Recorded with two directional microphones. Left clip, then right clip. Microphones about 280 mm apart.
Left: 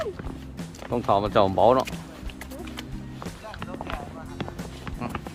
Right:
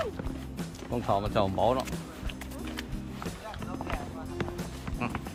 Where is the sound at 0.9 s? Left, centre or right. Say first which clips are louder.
Left 7 dB; centre.